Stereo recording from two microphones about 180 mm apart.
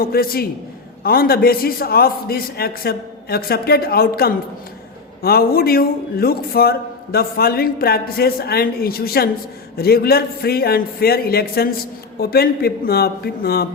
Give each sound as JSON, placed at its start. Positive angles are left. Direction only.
{"t": 0.0, "sound": "a man's voice", "side_deg": 55}